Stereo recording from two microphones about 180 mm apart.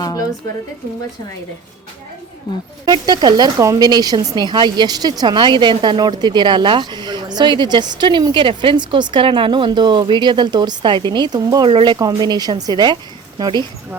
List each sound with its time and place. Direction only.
0.0 s a woman's voice: 20° left (ahead or behind)
2.8 s speech: 25° right (ahead or behind)